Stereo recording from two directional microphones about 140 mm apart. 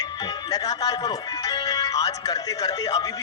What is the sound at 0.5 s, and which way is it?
A man's voice, 25° left (ahead or behind).